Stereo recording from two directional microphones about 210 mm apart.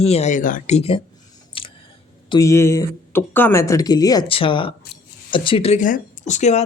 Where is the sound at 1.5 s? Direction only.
25° left (ahead or behind).